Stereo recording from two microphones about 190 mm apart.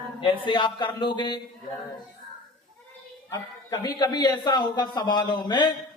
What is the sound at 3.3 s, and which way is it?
A man's voice, 20° left (ahead or behind).